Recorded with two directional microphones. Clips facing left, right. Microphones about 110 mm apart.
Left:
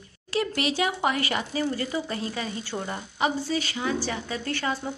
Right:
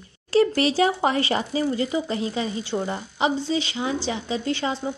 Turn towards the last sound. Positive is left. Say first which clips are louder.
# right 4 dB
turn(degrees=-20)  # may be behind; listen again after turning